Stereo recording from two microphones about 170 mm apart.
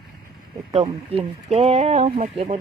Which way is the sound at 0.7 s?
40° right (ahead or behind).